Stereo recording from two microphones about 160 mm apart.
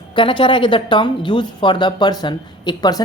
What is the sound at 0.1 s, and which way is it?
Speech, 30° left (ahead or behind).